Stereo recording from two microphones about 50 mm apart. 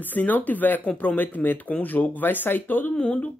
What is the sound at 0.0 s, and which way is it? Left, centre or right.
Speech, left.